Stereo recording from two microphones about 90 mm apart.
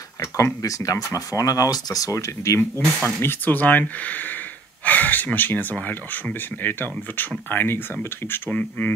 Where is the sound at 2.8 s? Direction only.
30° right (ahead or behind).